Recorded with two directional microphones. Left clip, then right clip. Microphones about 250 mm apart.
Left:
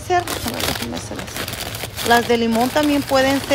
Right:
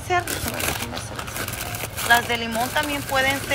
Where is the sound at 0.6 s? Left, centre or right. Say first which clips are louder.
Left 3 dB; left.